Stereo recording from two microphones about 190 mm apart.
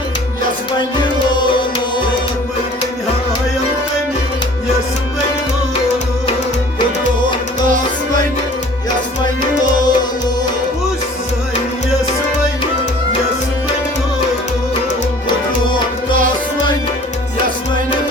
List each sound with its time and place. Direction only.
1.3 s music: 25° left (ahead or behind)
9.7 s music: 20° left (ahead or behind)